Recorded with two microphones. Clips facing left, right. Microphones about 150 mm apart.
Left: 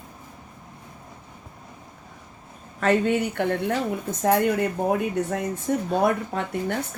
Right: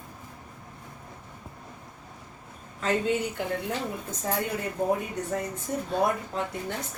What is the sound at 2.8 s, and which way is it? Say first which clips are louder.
A woman's voice: left 5 dB; 65° left (ahead or behind).